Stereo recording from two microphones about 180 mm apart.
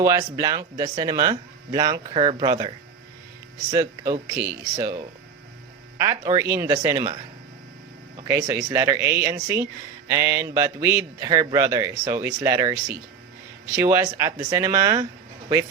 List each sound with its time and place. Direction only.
0.0 s a man's voice: 15° right (ahead or behind)
6.0 s a man's voice: 15° right (ahead or behind)
8.3 s a man's voice: 15° right (ahead or behind)